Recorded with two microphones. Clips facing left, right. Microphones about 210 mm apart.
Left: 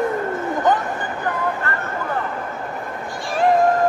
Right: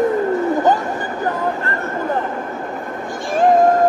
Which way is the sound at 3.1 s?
50° right (ahead or behind).